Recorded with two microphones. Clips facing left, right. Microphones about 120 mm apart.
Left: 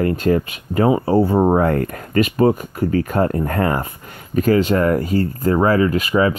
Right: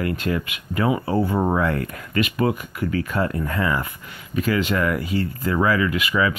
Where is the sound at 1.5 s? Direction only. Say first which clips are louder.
Left 6 dB; 45° left (ahead or behind).